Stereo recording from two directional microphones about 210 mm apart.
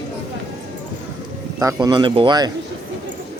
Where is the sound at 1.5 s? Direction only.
15° right (ahead or behind).